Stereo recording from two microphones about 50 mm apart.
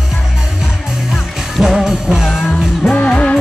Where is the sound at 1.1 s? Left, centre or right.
Centre.